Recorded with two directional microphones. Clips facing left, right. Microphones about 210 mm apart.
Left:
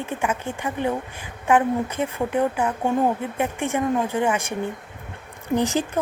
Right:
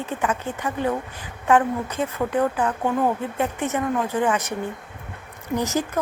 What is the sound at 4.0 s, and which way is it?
Speech, 25° left (ahead or behind).